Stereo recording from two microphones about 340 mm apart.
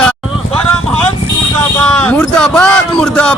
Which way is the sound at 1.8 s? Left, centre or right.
Centre.